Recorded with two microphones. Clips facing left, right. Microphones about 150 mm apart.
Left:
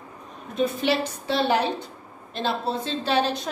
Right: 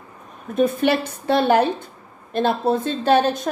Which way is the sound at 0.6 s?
50° right (ahead or behind).